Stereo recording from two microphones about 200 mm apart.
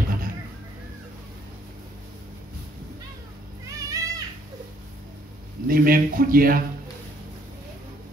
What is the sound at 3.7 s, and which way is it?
Children playing, 15° right (ahead or behind).